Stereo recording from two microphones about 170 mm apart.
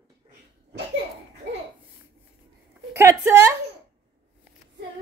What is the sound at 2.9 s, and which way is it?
Speech, 15° right (ahead or behind).